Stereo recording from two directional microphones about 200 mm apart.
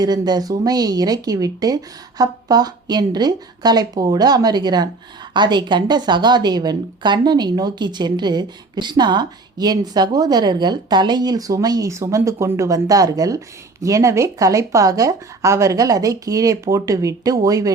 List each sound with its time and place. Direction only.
0.0 s a woman's voice: 20° right (ahead or behind)